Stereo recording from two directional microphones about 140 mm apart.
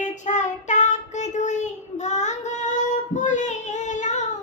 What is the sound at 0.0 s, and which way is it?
Child singing, 60° left (ahead or behind).